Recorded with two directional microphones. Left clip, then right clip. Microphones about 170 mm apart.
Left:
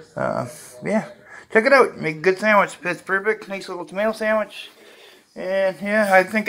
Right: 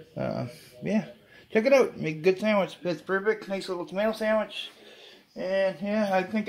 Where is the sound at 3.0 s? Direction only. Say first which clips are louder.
Left 5 dB; 10° left (ahead or behind).